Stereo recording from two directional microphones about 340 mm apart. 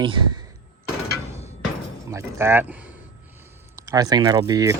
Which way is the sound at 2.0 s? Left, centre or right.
Centre.